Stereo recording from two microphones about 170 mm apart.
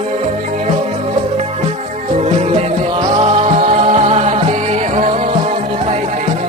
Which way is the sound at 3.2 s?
35° right (ahead or behind).